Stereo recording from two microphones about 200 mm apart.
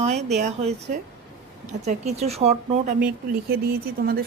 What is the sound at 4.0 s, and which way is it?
Speech, 50° right (ahead or behind).